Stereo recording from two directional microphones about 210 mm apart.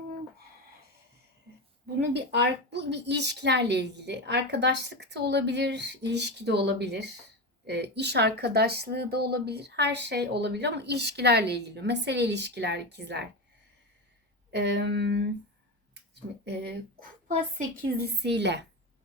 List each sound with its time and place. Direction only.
2.0 s a woman's voice: 55° right (ahead or behind)
14.5 s a woman's voice: 55° right (ahead or behind)
16.4 s a woman's voice: 50° right (ahead or behind)